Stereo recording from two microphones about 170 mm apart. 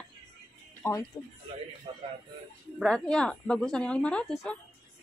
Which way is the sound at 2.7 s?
5° left (ahead or behind).